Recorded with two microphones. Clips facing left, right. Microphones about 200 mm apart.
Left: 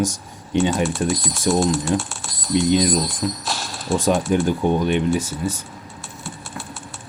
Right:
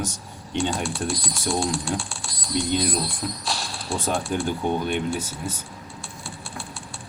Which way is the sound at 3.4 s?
Centre (ahead or behind).